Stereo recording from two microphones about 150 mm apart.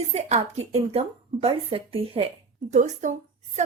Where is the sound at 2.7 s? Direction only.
55° right (ahead or behind).